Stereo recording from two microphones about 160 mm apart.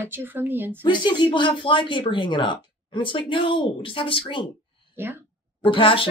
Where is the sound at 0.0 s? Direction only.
15° right (ahead or behind).